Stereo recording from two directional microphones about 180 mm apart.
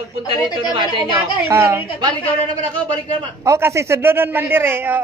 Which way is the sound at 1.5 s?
15° right (ahead or behind).